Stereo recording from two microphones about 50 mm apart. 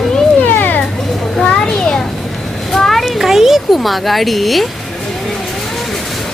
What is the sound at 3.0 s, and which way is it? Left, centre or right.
Speech, centre.